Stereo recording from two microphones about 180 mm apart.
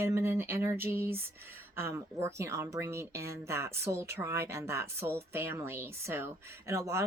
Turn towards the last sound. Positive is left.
turn(degrees=-15)  # may be behind; listen again after turning